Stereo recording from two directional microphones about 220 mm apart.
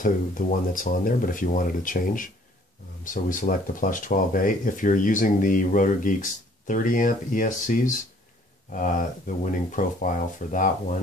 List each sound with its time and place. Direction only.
0.0 s speech: 35° left (ahead or behind)
9.4 s speech: 35° left (ahead or behind)